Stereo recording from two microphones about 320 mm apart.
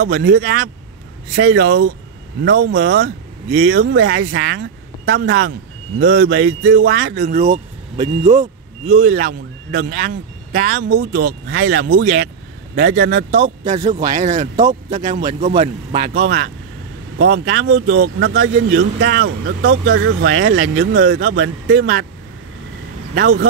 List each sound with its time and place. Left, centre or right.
0.0 s speech: right
8.0 s speech: centre
8.8 s a man's voice: right
23.1 s speech: right